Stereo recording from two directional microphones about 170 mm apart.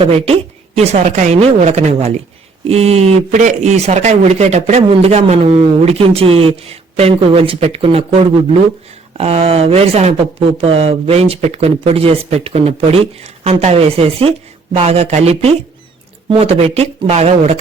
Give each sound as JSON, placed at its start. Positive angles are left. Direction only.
{"t": 0.0, "sound": "speech", "side_deg": -35}